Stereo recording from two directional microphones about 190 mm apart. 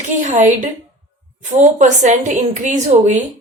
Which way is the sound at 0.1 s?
40° right (ahead or behind).